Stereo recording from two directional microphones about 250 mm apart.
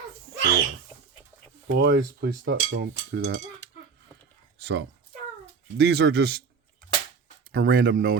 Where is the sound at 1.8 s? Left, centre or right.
Right.